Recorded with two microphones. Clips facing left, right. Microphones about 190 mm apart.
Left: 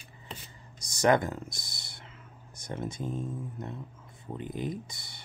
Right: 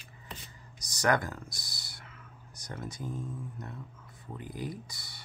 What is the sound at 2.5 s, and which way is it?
Speech, 25° left (ahead or behind).